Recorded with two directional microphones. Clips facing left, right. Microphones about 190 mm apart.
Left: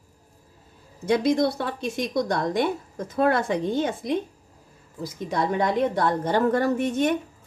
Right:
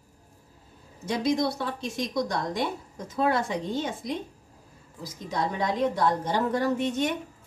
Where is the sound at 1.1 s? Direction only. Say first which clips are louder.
Left 5 dB; 60° left (ahead or behind).